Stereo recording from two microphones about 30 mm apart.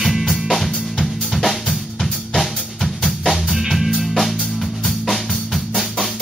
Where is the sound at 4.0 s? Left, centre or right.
Centre.